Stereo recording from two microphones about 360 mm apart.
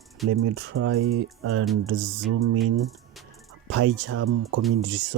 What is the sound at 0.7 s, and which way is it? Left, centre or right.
Speech, right.